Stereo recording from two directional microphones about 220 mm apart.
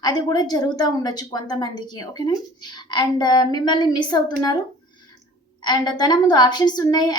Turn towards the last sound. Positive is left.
turn(degrees=20)  # may be behind; listen again after turning